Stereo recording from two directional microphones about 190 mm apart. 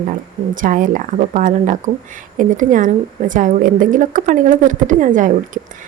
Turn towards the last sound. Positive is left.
turn(degrees=-45)  # may be behind; listen again after turning